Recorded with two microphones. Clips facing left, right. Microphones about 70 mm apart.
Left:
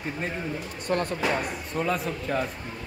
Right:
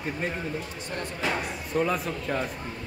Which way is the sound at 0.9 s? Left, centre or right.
Left.